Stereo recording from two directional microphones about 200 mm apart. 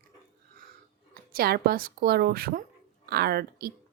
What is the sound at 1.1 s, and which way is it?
Speech, 50° right (ahead or behind).